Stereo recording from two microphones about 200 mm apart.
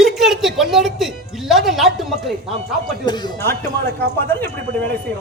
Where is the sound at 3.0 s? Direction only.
15° left (ahead or behind).